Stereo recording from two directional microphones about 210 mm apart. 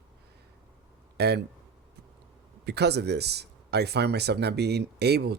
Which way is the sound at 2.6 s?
50° right (ahead or behind).